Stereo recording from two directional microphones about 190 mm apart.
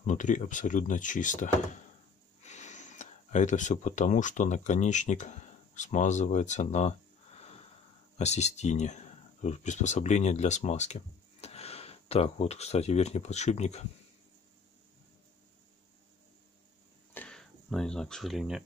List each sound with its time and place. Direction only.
0.0 s speech: 40° left (ahead or behind)
8.2 s speech: 35° left (ahead or behind)
17.1 s a sound: 5° left (ahead or behind)